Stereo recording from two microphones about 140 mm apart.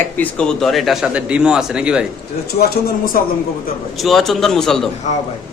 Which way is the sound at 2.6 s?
90° left.